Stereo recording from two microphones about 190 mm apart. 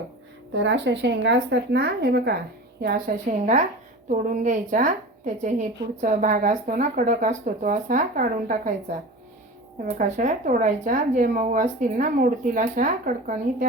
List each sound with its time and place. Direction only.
0.5 s a woman's voice: 70° right (ahead or behind); by 9.0 s 45° right (ahead or behind)
10.0 s a woman's voice: 40° right (ahead or behind)